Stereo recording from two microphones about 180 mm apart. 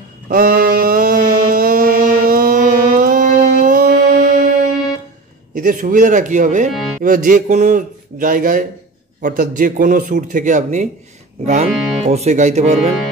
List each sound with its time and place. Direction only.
0.3 s mantra: 50° right (ahead or behind)
5.5 s speech: 50° right (ahead or behind)